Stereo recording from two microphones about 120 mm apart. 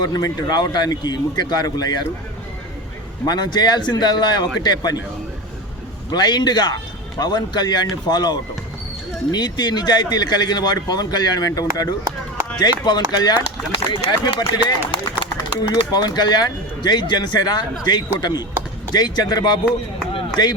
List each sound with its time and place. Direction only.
0.0 s speech: 35° left (ahead or behind)
3.2 s speech: 35° left (ahead or behind)
6.1 s speech: 35° left (ahead or behind)
20.1 s a sound: 35° left (ahead or behind)